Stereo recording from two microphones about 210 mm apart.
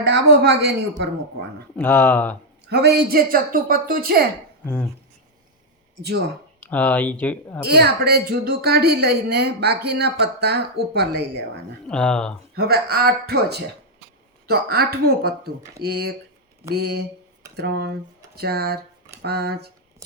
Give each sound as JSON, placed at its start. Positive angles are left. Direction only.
{"t": 0.1, "sound": "speech", "side_deg": -55}
{"t": 1.7, "sound": "speech", "side_deg": 10}
{"t": 2.6, "sound": "speech", "side_deg": -50}
{"t": 4.6, "sound": "speech", "side_deg": 5}
{"t": 6.0, "sound": "speech", "side_deg": -50}
{"t": 6.6, "sound": "speech", "side_deg": 5}
{"t": 7.6, "sound": "speech", "side_deg": -50}
{"t": 11.9, "sound": "speech", "side_deg": 5}
{"t": 12.5, "sound": "speech", "side_deg": -50}